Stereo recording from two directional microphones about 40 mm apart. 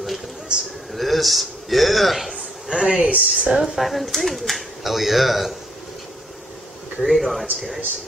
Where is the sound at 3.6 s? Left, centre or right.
Centre.